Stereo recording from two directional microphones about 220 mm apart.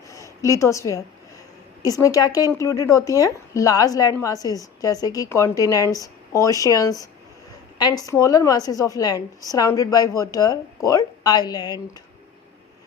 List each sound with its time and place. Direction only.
0.1 s a woman's voice: 15° left (ahead or behind)